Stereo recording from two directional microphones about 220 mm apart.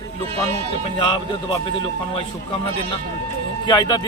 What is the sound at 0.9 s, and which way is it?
Speech, 20° left (ahead or behind).